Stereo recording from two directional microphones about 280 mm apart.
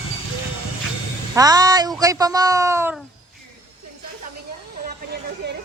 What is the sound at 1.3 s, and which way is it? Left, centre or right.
Speech, centre.